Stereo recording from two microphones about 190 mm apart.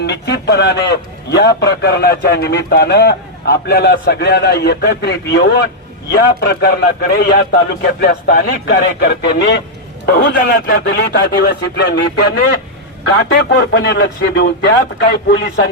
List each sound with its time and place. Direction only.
0.0 s a man's voice: 60° left (ahead or behind)